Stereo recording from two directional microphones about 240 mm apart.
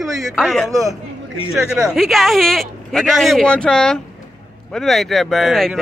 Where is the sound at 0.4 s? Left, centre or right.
Centre.